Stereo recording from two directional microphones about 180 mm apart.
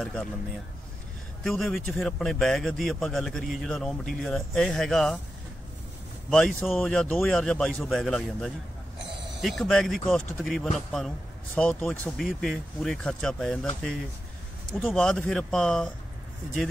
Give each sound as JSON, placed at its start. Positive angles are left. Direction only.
{"t": 0.0, "sound": "a man's voice", "side_deg": 5}
{"t": 1.4, "sound": "a man's voice", "side_deg": 0}
{"t": 6.3, "sound": "a man's voice", "side_deg": 0}